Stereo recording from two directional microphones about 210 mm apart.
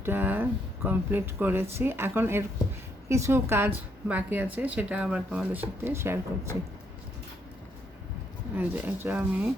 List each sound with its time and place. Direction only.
0.0 s speech: 10° right (ahead or behind)
8.5 s speech: 10° right (ahead or behind)